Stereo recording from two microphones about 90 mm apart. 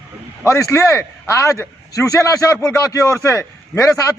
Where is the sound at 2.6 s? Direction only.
40° left (ahead or behind).